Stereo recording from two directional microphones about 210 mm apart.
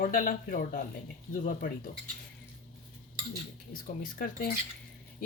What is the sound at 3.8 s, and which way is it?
Speech, 40° left (ahead or behind).